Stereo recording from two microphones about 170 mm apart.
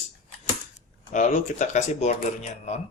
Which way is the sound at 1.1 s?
45° left (ahead or behind).